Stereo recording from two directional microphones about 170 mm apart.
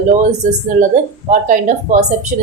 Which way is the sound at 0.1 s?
45° right (ahead or behind).